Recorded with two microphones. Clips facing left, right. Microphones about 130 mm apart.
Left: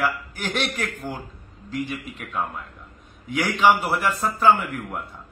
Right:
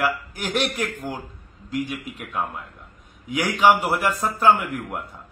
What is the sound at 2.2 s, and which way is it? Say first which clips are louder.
A man's voice: even; 5° right (ahead or behind).